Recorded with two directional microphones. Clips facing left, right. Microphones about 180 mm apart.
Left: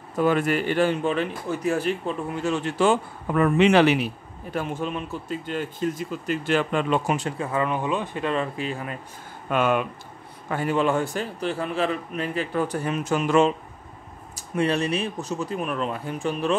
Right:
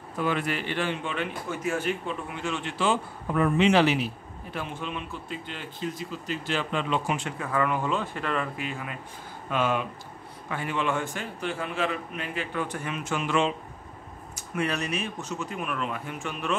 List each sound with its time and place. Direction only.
0.2 s a man's voice: 45° left (ahead or behind); by 4.1 s 60° left (ahead or behind)
4.5 s a man's voice: 45° left (ahead or behind)
9.5 s speech: 55° left (ahead or behind)
10.5 s a man's voice: 40° left (ahead or behind)
14.3 s a man's voice: 30° left (ahead or behind)